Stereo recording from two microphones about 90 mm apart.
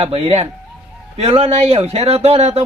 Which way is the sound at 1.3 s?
90° right.